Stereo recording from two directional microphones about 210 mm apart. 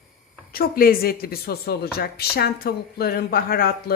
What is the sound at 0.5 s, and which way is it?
A woman's voice, 45° left (ahead or behind).